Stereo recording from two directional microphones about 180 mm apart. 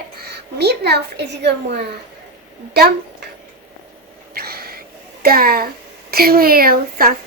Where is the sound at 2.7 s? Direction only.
60° right (ahead or behind).